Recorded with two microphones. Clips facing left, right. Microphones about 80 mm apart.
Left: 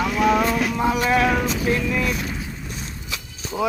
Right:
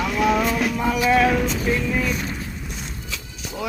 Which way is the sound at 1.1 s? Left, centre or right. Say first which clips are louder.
Right 1 dB; centre.